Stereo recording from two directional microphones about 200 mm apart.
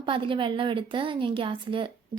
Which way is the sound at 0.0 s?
25° right (ahead or behind).